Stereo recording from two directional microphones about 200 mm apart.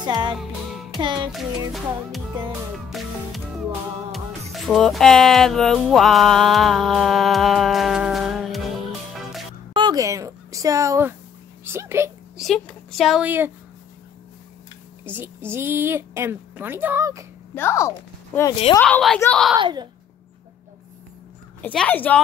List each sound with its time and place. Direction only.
0.0 s music: 20° right (ahead or behind)
2.9 s music: centre (ahead or behind)
9.8 s a sound: 20° right (ahead or behind)
12.4 s speech: 5° left (ahead or behind)
15.0 s a woman's voice: 10° right (ahead or behind)
17.6 s speech: 15° left (ahead or behind)
18.8 s a woman's voice: 5° left (ahead or behind)
19.5 s music: 20° right (ahead or behind)
21.5 s a woman's voice: 5° left (ahead or behind)